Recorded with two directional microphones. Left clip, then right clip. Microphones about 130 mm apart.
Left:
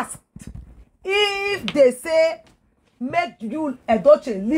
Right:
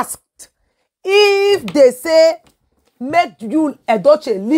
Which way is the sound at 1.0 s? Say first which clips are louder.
Right 9 dB; 25° right (ahead or behind).